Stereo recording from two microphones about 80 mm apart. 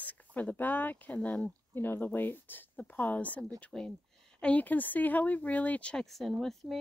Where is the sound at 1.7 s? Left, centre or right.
Left.